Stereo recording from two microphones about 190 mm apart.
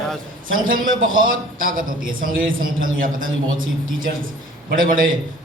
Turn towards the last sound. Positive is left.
turn(degrees=-45)  # may be behind; listen again after turning